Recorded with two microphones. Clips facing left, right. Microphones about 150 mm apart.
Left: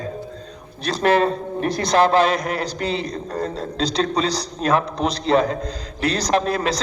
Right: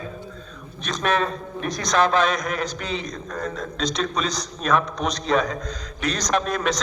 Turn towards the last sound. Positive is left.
turn(degrees=30)  # may be behind; listen again after turning